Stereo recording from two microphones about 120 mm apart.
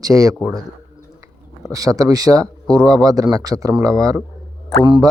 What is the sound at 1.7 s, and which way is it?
Speech, 30° right (ahead or behind).